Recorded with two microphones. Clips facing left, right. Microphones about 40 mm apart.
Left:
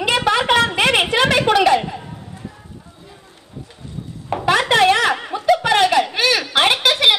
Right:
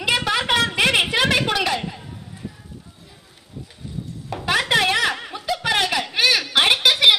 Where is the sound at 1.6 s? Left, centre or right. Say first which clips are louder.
Left 8 dB; left.